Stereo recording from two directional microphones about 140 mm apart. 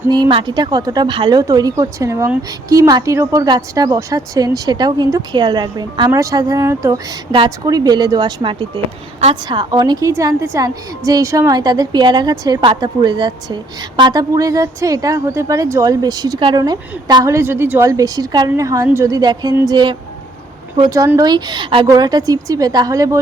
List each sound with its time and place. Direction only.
0.1 s a woman's voice: 35° right (ahead or behind)
7.3 s a woman's voice: 35° right (ahead or behind)
17.2 s a woman's voice: 20° right (ahead or behind)
20.8 s a woman's voice: 20° right (ahead or behind)